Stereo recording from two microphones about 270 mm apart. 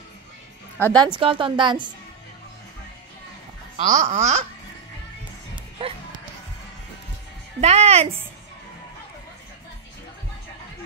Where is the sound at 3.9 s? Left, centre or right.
Right.